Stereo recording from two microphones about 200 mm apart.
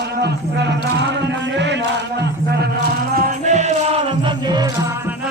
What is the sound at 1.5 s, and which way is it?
Chant, 60° right (ahead or behind).